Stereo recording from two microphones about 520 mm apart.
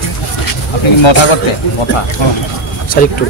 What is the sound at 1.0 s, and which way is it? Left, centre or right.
Speech, left.